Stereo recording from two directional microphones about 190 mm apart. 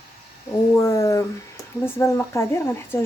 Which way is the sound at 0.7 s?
15° left (ahead or behind).